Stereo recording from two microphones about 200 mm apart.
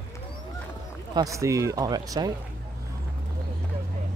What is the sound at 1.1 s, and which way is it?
Speech, 15° right (ahead or behind).